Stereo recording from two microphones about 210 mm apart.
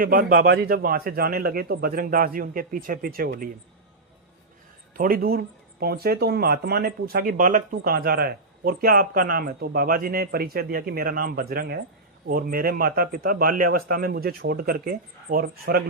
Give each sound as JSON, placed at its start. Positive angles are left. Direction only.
{"t": 0.0, "sound": "speech", "side_deg": -40}
{"t": 4.9, "sound": "speech", "side_deg": -45}